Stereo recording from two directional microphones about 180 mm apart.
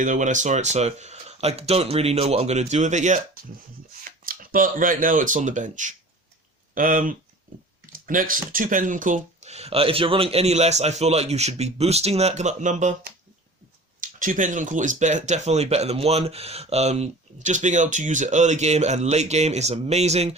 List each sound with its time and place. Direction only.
0.0 s speech: 45° right (ahead or behind)
14.0 s speech: 45° right (ahead or behind)